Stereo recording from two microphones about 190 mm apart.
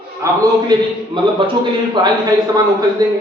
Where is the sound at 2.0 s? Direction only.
20° right (ahead or behind).